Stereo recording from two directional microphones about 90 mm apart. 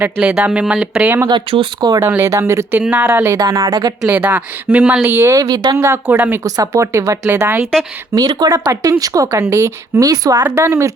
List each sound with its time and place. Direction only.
0.0 s speech: 10° right (ahead or behind)
1.3 s speech: 65° right (ahead or behind)
2.0 s speech: 25° right (ahead or behind)
2.8 s speech: 15° right (ahead or behind)
3.1 s speech: 30° right (ahead or behind)
3.4 s a woman's voice: 40° right (ahead or behind)
4.1 s speech: 20° right (ahead or behind)
5.3 s a woman's voice: 45° right (ahead or behind)
5.7 s speech: 30° right (ahead or behind)
6.1 s speech: 20° right (ahead or behind)
6.4 s speech: 35° right (ahead or behind)
8.1 s speech: 45° right (ahead or behind)
10.4 s speech: 30° right (ahead or behind)